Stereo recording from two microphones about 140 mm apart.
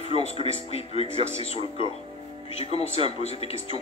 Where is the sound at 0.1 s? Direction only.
45° left (ahead or behind).